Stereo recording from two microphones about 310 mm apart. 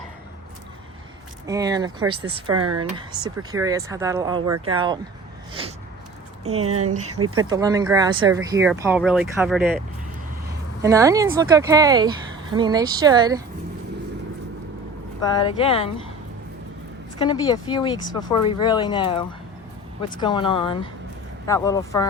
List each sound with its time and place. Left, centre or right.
1.5 s speech: centre
2.5 s speech: right
3.1 s speech: centre
4.4 s speech: right
4.7 s speech: centre
6.6 s speech: right
7.4 s speech: centre
10.8 s speech: centre
15.2 s speech: centre
17.2 s speech: centre